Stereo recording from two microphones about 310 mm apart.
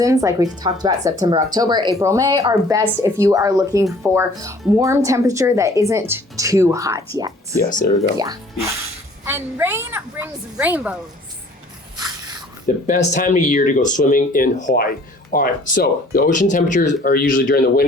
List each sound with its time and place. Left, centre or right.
0.0 s speech: centre
7.5 s speech: left
9.2 s speech: centre
12.6 s speech: left